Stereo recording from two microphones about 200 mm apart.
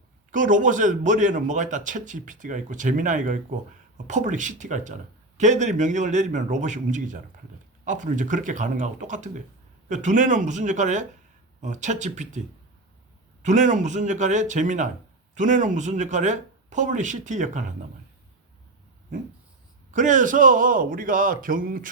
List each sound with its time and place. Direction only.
0.3 s a man's voice: 40° right (ahead or behind)
13.4 s a man's voice: 40° right (ahead or behind)
19.9 s a man's voice: 40° right (ahead or behind)